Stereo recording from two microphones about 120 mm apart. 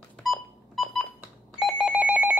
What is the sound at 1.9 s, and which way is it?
Telephone, 10° right (ahead or behind).